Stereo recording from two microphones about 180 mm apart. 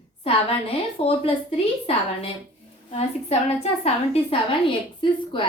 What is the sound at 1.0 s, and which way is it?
Speech, 30° left (ahead or behind).